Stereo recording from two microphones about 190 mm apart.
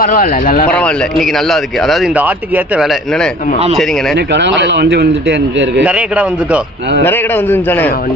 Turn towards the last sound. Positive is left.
turn(degrees=10)  # may be behind; listen again after turning